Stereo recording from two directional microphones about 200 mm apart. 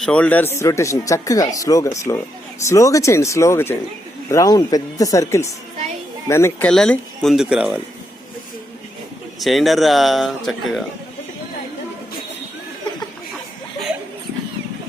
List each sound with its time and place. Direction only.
0.0 s speech: 5° left (ahead or behind)
6.7 s speech: 5° left (ahead or behind)
9.4 s speech: centre (ahead or behind)